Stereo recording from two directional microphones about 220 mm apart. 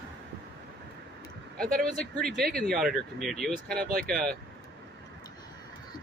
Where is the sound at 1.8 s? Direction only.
Centre (ahead or behind).